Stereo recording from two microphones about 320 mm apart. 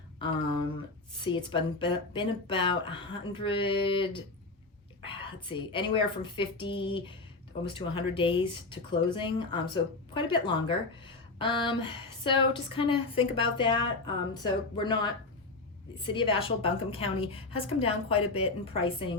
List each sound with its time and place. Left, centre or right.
1.1 s speech: centre